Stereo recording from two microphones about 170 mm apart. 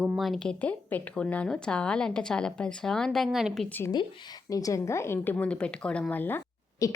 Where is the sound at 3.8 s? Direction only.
25° left (ahead or behind).